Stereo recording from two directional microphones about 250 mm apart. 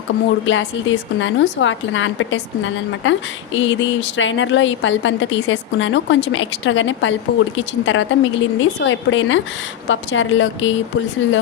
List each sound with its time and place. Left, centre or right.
0.4 s a woman's voice: left